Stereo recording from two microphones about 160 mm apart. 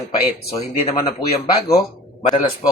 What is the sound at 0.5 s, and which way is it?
Speech, 40° left (ahead or behind).